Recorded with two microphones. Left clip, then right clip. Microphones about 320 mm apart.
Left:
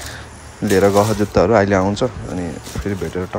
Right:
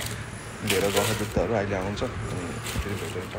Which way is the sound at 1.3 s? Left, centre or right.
Left.